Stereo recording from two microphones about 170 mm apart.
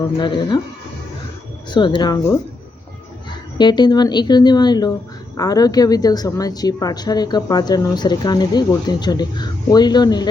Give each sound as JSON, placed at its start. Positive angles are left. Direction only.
{"t": 0.2, "sound": "a woman's voice", "side_deg": 30}
{"t": 1.7, "sound": "a woman's voice", "side_deg": 25}
{"t": 3.6, "sound": "a woman's voice", "side_deg": 25}